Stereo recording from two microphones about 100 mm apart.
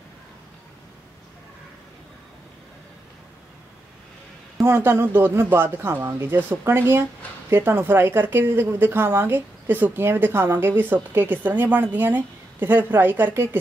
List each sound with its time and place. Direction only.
4.6 s speech: 25° right (ahead or behind)